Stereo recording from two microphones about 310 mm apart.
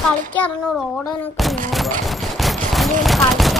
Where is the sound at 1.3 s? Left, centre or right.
Centre.